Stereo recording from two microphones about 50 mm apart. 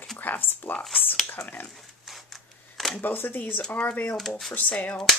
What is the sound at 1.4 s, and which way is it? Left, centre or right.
Speech, left.